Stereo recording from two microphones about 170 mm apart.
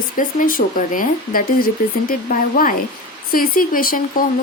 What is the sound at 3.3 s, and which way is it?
Speech, 55° left (ahead or behind).